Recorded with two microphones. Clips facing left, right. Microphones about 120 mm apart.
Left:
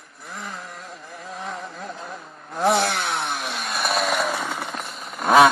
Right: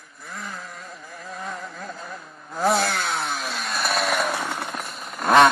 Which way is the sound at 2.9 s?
Centre (ahead or behind).